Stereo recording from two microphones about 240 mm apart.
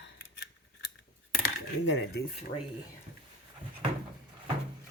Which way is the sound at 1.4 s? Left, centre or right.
Left.